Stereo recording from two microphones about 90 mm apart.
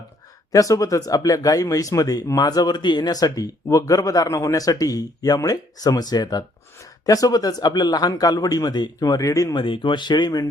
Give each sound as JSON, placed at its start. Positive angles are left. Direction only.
{"t": 0.5, "sound": "a man's voice", "side_deg": 40}
{"t": 9.6, "sound": "speech", "side_deg": 65}